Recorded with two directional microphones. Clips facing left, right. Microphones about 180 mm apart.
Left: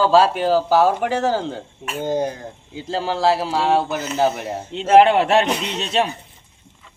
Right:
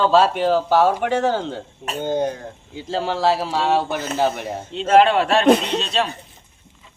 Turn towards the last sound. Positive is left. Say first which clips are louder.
# left 2 dB
turn(degrees=20)  # may be behind; listen again after turning